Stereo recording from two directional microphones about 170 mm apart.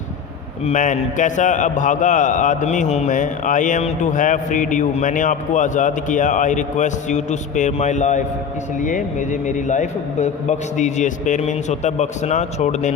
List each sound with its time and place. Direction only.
0.6 s a man's voice: 45° left (ahead or behind)